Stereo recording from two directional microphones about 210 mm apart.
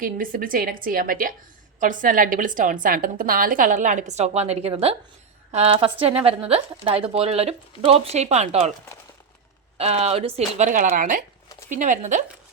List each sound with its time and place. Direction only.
0.0 s a woman's voice: 40° right (ahead or behind)
9.7 s a woman's voice: 30° right (ahead or behind)